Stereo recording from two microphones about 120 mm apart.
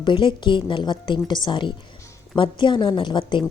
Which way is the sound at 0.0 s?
40° left (ahead or behind).